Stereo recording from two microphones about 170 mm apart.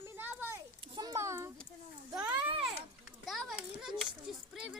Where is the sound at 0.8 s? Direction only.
25° right (ahead or behind).